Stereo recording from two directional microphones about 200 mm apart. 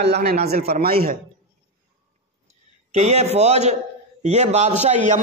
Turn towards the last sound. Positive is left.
turn(degrees=-35)  # may be behind; listen again after turning